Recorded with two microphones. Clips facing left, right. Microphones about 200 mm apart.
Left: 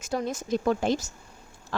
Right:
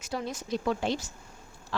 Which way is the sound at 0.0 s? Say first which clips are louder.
Left 5 dB; 50° left (ahead or behind).